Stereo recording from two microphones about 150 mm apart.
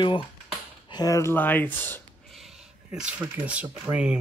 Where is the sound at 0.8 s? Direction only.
25° left (ahead or behind).